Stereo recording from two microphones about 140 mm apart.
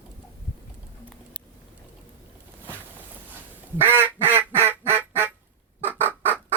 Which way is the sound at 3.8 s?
15° right (ahead or behind).